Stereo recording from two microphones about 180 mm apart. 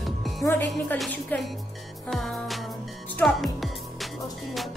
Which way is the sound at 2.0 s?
Centre (ahead or behind).